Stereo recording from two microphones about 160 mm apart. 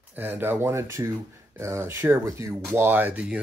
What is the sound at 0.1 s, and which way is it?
Speech, 10° right (ahead or behind).